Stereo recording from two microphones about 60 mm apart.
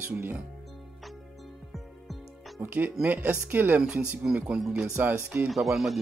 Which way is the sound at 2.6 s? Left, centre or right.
Right.